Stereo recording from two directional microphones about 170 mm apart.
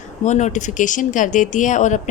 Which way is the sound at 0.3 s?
45° left (ahead or behind).